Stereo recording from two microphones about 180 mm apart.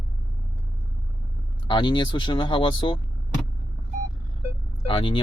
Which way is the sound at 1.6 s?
30° left (ahead or behind).